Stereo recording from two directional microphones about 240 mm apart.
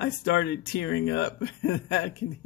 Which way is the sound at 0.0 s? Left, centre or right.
Left.